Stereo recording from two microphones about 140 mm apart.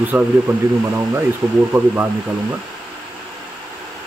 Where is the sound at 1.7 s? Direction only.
15° right (ahead or behind).